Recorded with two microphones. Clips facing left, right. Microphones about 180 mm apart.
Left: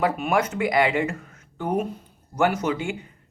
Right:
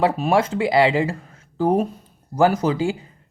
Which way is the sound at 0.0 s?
30° right (ahead or behind).